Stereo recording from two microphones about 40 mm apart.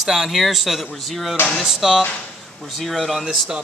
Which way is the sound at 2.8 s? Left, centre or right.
Centre.